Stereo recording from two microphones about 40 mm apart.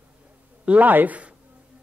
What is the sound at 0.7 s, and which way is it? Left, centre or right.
Speech, right.